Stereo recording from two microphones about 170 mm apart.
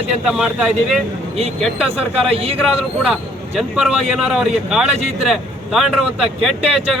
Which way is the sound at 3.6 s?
5° right (ahead or behind).